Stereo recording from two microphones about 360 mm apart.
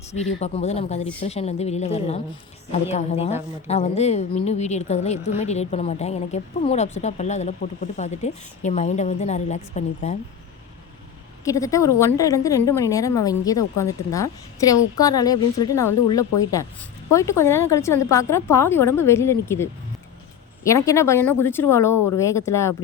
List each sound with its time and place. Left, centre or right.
0.1 s a woman's voice: centre
11.4 s a woman's voice: centre
17.1 s a woman's voice: centre
20.7 s a woman's voice: centre